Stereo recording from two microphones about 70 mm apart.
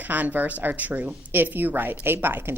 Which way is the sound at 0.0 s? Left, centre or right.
Right.